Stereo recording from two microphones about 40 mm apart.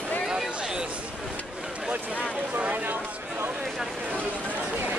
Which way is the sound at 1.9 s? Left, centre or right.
Right.